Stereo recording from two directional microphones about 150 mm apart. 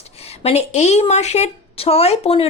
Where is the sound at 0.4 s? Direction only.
50° left (ahead or behind).